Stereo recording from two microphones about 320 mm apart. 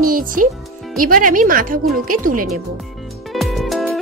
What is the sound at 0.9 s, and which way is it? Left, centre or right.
Speech, right.